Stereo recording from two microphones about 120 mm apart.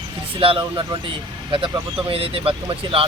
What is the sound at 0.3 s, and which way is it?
Speech, 50° right (ahead or behind).